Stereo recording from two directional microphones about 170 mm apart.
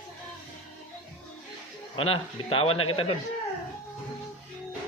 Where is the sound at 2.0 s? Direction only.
30° left (ahead or behind).